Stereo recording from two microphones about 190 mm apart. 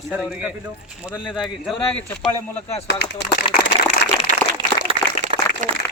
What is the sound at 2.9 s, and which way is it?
Speech, 55° left (ahead or behind).